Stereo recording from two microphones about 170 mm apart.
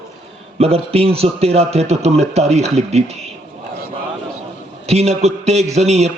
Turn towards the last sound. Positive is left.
turn(degrees=-40)  # may be behind; listen again after turning